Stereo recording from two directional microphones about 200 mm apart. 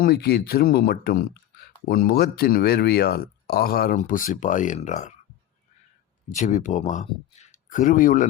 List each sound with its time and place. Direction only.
0.0 s speech: 50° left (ahead or behind)
6.2 s speech: 40° left (ahead or behind)